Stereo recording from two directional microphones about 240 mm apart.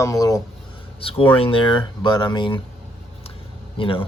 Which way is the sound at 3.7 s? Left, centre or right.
Left.